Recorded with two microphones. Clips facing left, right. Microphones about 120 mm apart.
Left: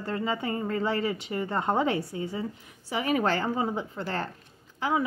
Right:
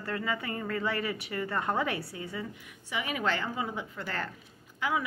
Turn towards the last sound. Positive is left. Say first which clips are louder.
# left 3 dB
turn(degrees=30)  # may be behind; listen again after turning